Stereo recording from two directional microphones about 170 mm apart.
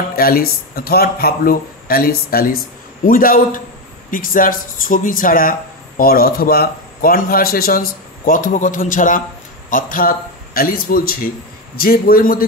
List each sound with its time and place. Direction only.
0.1 s a man's voice: 60° left (ahead or behind)